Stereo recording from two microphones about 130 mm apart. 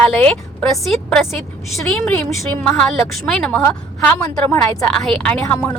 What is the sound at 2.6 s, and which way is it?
Speech, 5° left (ahead or behind).